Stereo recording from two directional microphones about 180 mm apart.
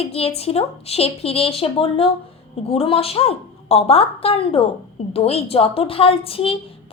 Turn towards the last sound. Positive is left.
turn(degrees=30)  # may be behind; listen again after turning